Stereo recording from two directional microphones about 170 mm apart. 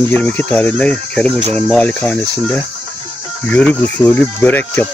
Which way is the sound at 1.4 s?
35° right (ahead or behind).